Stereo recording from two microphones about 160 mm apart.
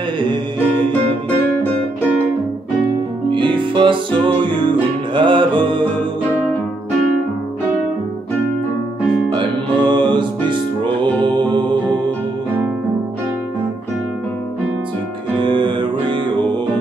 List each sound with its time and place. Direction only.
3.3 s music: 30° right (ahead or behind)
9.3 s music: 30° right (ahead or behind)
15.3 s music: 30° right (ahead or behind)